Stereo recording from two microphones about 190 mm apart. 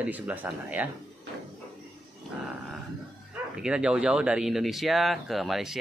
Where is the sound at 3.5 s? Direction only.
5° right (ahead or behind).